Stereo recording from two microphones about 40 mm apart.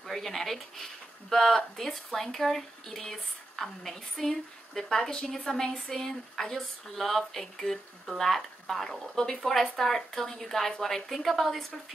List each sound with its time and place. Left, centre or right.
0.0 s speech: centre